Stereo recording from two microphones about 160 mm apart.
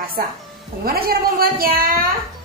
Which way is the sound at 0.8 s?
70° right (ahead or behind).